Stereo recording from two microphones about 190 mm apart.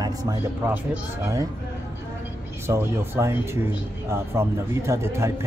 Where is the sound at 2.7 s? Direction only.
15° right (ahead or behind).